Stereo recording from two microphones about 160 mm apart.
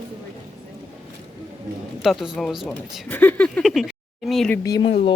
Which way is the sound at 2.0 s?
Centre (ahead or behind).